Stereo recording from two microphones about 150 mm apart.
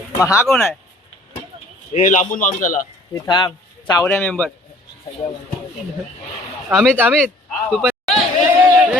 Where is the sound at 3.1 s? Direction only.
30° left (ahead or behind).